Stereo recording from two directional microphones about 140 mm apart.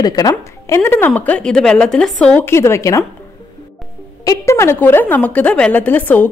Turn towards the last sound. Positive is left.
turn(degrees=10)  # may be behind; listen again after turning